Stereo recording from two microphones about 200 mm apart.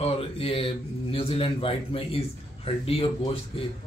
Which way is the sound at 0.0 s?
30° left (ahead or behind).